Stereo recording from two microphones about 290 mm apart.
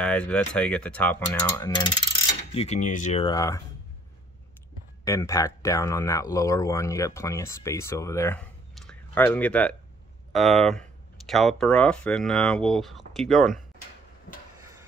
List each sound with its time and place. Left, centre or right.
0.0 s speech: centre
5.0 s speech: centre